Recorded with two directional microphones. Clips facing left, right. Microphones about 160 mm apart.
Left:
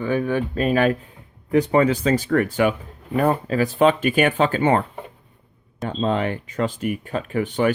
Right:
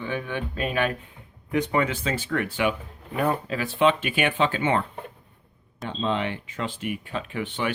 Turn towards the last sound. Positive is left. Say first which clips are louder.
# left 8 dB
turn(degrees=45)  # may be behind; listen again after turning